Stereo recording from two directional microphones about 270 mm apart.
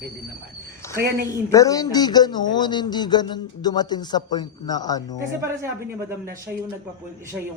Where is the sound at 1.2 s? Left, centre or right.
Centre.